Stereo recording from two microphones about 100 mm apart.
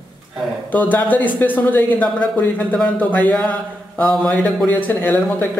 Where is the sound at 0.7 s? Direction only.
15° left (ahead or behind).